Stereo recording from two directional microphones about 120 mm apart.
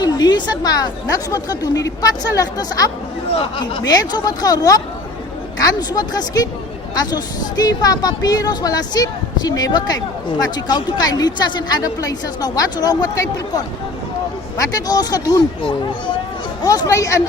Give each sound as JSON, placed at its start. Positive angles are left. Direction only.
{"t": 0.0, "sound": "speech", "side_deg": 35}
{"t": 14.6, "sound": "speech", "side_deg": 30}
{"t": 16.6, "sound": "speech", "side_deg": 30}